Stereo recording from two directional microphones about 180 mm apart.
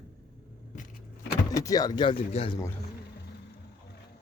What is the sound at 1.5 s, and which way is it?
Speech, 20° left (ahead or behind).